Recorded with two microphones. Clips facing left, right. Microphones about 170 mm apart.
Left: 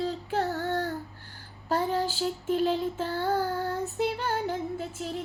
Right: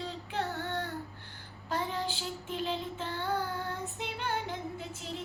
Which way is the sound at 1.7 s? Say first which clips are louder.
Left 7 dB; 40° left (ahead or behind).